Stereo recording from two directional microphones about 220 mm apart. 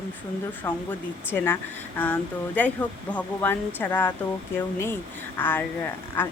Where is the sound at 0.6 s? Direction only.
10° left (ahead or behind).